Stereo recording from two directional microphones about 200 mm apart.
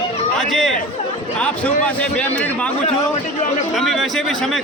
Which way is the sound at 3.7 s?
Centre (ahead or behind).